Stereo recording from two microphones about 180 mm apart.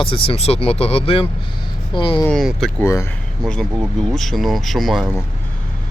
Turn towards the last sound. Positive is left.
turn(degrees=0)  # may be behind; listen again after turning